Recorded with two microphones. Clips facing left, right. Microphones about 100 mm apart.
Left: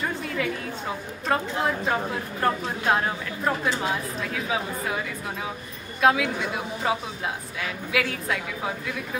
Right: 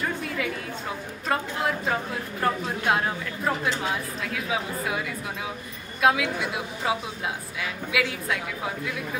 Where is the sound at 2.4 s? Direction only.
Centre (ahead or behind).